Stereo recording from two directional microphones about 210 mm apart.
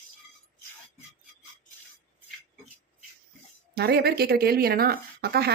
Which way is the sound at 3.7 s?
50° right (ahead or behind).